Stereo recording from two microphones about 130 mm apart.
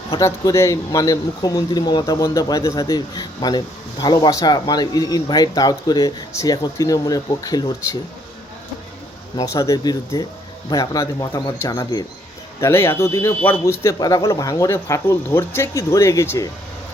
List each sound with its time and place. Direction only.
0.1 s a man's voice: 25° left (ahead or behind)
9.3 s a man's voice: 25° left (ahead or behind)